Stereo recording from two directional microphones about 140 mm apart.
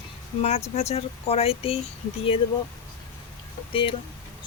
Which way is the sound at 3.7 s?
40° left (ahead or behind).